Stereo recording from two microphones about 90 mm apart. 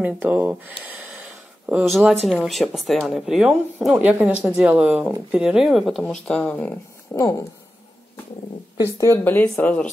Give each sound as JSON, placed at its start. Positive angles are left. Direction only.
{"t": 0.0, "sound": "speech", "side_deg": -20}
{"t": 1.9, "sound": "speech", "side_deg": 0}
{"t": 3.9, "sound": "speech", "side_deg": -15}
{"t": 7.2, "sound": "speech", "side_deg": 35}
{"t": 8.8, "sound": "speech", "side_deg": 35}
{"t": 9.2, "sound": "speech", "side_deg": 20}